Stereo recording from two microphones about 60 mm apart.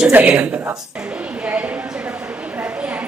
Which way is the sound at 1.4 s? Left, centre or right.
Right.